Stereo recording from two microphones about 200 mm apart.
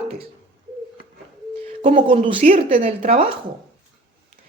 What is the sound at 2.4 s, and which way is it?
Speech, 40° right (ahead or behind).